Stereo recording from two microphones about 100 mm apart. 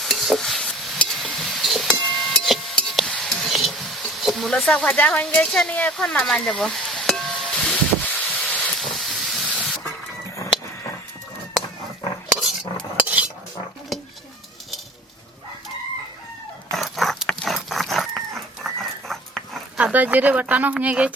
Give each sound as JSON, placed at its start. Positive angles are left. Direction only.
{"t": 0.0, "sound": "stir", "side_deg": 0}
{"t": 2.4, "sound": "a sound", "side_deg": 5}
{"t": 8.8, "sound": "steam", "side_deg": 0}
{"t": 13.0, "sound": "cutlery", "side_deg": -15}
{"t": 13.9, "sound": "dishes", "side_deg": 0}
{"t": 16.7, "sound": "a sound", "side_deg": 0}
{"t": 18.6, "sound": "dog", "side_deg": 5}
{"t": 19.7, "sound": "speech", "side_deg": -15}